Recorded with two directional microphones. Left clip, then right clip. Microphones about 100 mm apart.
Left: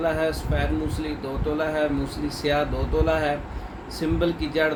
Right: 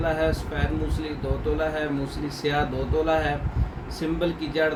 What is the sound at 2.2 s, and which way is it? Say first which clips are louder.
Speech: left 2 dB; 15° left (ahead or behind).